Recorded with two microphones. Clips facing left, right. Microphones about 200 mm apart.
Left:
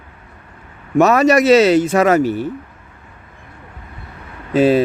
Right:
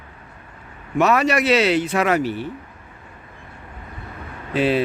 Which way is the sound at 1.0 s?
45° left (ahead or behind).